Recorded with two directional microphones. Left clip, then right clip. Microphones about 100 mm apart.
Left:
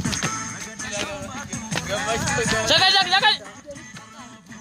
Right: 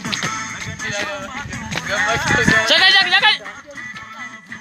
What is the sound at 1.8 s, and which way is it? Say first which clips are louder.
Music: right 8 dB; 10° left (ahead or behind).